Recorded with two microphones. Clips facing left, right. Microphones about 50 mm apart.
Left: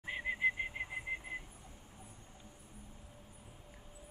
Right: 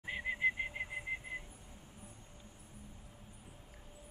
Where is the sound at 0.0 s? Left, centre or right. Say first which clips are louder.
Even; centre.